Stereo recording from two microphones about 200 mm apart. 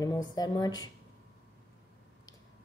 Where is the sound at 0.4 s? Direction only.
20° left (ahead or behind).